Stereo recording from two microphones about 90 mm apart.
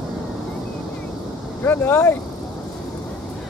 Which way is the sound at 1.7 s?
25° left (ahead or behind).